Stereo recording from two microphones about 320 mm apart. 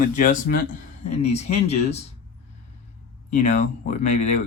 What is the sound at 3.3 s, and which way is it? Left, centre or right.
Speech, left.